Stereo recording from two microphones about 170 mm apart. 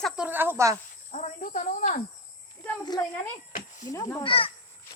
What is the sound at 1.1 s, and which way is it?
Speech, 45° left (ahead or behind).